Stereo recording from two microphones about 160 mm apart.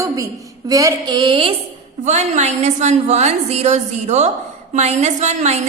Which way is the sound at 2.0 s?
45° right (ahead or behind).